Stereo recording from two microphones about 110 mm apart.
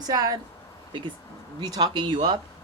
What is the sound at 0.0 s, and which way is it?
Speech, 35° right (ahead or behind).